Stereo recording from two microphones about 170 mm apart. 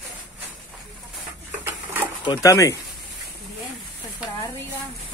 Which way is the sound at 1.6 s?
15° right (ahead or behind).